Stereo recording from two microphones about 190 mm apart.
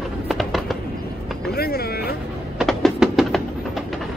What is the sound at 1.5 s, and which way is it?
Vehicle, 55° left (ahead or behind).